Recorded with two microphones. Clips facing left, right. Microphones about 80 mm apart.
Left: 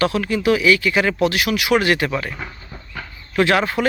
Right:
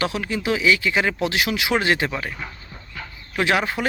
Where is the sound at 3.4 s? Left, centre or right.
Centre.